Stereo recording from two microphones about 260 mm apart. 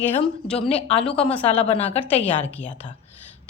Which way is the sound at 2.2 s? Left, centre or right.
Left.